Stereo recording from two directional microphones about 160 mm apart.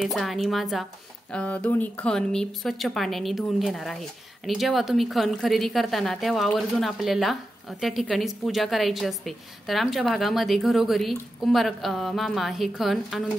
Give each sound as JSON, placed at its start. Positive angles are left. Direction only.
{"t": 0.0, "sound": "a woman's voice", "side_deg": 0}